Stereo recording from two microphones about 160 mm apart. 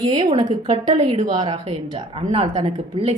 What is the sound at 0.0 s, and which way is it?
A woman's voice, 30° right (ahead or behind).